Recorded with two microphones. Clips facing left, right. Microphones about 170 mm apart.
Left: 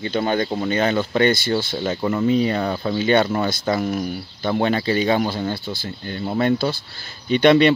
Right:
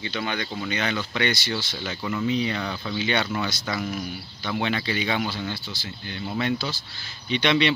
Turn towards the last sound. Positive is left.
turn(degrees=50)  # may be behind; listen again after turning